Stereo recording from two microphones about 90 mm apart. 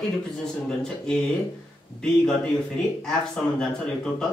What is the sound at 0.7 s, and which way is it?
Speech, 5° left (ahead or behind).